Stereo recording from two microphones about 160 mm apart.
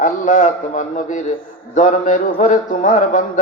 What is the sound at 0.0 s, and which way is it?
A man's voice, 50° left (ahead or behind).